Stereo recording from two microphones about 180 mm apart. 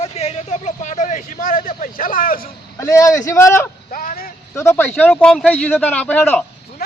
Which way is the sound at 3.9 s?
50° left (ahead or behind).